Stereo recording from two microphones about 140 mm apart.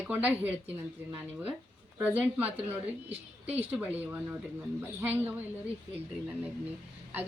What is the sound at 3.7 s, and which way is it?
Speech, 10° right (ahead or behind).